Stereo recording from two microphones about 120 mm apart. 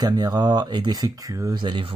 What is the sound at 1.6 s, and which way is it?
Speech, 45° right (ahead or behind).